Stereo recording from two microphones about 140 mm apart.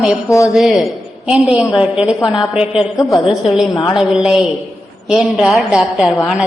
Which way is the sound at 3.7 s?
25° left (ahead or behind).